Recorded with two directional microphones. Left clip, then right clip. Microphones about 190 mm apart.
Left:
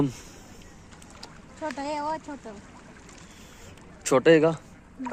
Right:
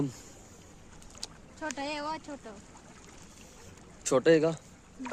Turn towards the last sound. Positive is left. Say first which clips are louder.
# left 5 dB
turn(degrees=10)  # may be behind; listen again after turning